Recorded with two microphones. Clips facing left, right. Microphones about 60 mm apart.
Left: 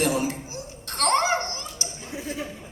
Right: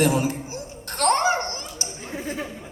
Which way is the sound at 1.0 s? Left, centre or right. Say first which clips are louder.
Right 2 dB; right.